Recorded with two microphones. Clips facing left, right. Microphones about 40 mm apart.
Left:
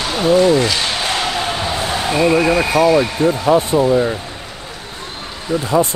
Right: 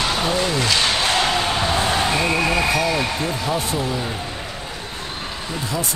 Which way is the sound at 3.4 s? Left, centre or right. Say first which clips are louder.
Left 11 dB; left.